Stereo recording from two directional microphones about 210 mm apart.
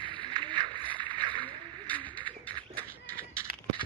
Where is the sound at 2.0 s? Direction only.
25° right (ahead or behind).